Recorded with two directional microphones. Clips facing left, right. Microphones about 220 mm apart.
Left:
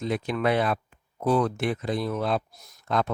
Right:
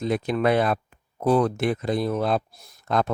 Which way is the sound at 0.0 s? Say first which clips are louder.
Right 3 dB; 40° right (ahead or behind).